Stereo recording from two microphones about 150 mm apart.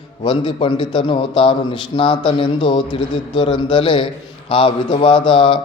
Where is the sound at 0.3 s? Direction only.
35° left (ahead or behind).